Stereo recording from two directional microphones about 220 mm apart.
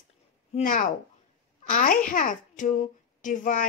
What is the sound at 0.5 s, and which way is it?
A child's voice, 35° left (ahead or behind).